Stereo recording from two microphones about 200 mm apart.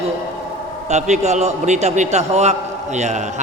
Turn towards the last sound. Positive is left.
turn(degrees=-35)  # may be behind; listen again after turning